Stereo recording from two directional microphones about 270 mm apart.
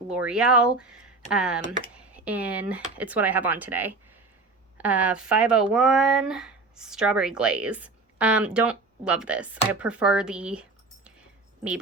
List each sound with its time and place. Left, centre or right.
0.1 s speech: centre